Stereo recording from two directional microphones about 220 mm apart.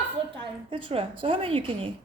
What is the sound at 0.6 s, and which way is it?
A woman's voice, 25° right (ahead or behind).